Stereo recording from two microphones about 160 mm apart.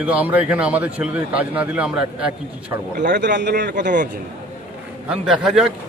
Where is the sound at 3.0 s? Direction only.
90° right.